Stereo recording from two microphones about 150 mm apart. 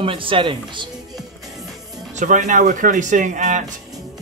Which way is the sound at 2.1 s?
55° right (ahead or behind).